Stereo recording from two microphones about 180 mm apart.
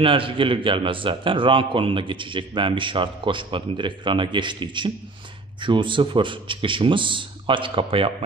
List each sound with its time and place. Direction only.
0.0 s a man's voice: 30° right (ahead or behind)